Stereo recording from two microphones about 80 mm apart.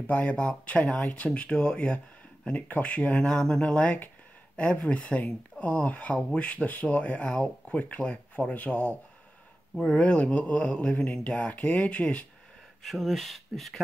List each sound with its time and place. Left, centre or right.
0.0 s speech: centre
12.8 s speech: centre